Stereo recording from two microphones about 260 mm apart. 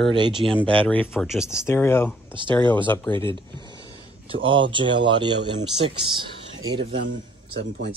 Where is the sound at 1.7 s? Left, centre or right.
Centre.